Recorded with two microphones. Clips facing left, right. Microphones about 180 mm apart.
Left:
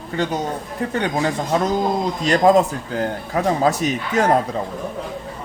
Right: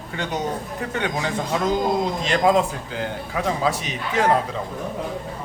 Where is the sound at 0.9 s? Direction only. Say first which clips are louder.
Left 4 dB; 40° left (ahead or behind).